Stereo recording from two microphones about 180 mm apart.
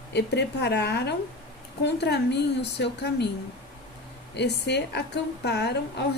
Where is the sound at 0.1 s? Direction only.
70° left (ahead or behind).